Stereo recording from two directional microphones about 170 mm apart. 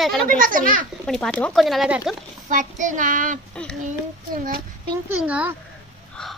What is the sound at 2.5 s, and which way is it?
Child singing, 50° right (ahead or behind).